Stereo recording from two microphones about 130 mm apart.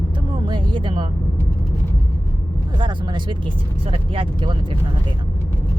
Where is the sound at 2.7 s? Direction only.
35° right (ahead or behind).